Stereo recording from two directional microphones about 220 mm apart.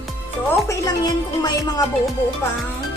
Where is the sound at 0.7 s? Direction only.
15° left (ahead or behind).